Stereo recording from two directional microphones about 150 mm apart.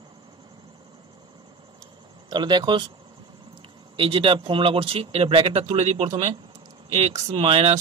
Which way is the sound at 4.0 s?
35° right (ahead or behind).